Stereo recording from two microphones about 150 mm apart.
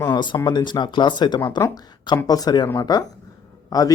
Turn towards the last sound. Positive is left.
turn(degrees=25)  # may be behind; listen again after turning